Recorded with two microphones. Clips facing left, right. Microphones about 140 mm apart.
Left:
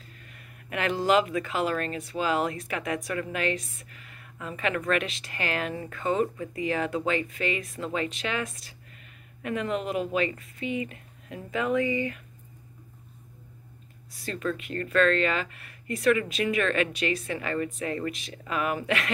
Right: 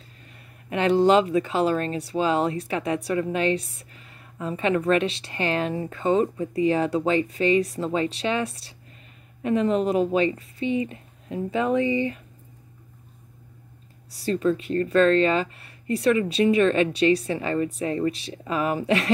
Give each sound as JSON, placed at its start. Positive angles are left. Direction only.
{"t": 0.3, "sound": "speech", "side_deg": -30}
{"t": 14.1, "sound": "speech", "side_deg": -30}